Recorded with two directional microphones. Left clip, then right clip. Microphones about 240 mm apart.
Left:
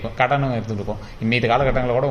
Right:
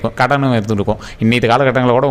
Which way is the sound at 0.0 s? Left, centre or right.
Right.